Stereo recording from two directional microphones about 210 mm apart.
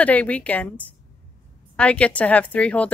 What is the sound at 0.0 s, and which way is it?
Speech, 5° left (ahead or behind).